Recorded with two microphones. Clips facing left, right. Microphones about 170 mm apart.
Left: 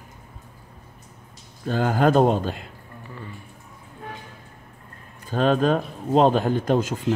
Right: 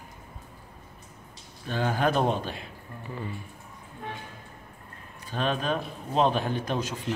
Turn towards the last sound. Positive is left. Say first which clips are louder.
# left 8 dB
turn(degrees=45)  # may be behind; listen again after turning